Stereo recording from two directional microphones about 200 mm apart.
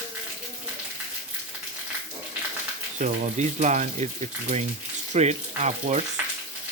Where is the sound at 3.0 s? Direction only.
35° right (ahead or behind).